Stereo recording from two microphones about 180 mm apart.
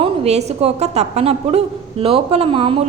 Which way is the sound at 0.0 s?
35° right (ahead or behind).